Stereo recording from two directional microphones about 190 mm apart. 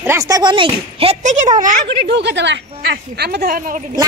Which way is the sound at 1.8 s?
65° right (ahead or behind).